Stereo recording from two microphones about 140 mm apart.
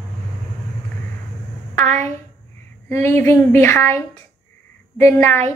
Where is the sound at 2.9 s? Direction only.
15° left (ahead or behind).